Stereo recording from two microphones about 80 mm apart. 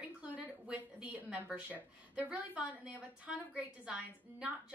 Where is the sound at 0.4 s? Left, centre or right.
Centre.